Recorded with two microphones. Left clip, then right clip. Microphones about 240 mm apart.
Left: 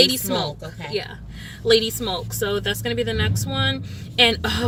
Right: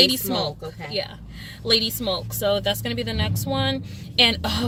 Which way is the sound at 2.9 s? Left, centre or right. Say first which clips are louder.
Left 4 dB; centre.